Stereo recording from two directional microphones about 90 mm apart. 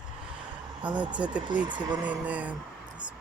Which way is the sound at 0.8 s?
15° right (ahead or behind).